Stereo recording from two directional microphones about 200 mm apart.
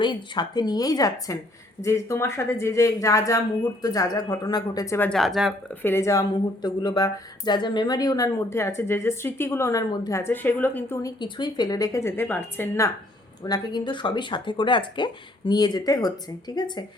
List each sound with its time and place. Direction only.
0.0 s speech: 20° left (ahead or behind); by 5.5 s centre (ahead or behind)
5.8 s speech: 10° left (ahead or behind)